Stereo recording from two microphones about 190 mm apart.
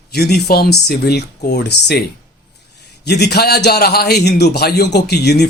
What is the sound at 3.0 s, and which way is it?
A man's voice, 60° left (ahead or behind).